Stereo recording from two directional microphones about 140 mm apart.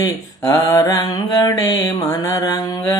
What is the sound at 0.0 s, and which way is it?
Speech, 25° left (ahead or behind).